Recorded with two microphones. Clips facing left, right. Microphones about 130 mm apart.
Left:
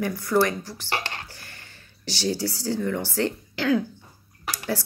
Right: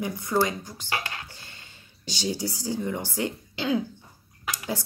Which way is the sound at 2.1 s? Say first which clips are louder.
Left 3 dB; 20° right (ahead or behind).